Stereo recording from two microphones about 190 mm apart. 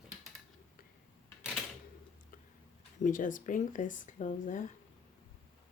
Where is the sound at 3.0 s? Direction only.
45° left (ahead or behind).